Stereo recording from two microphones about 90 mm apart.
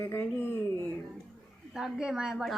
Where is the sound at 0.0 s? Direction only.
25° left (ahead or behind).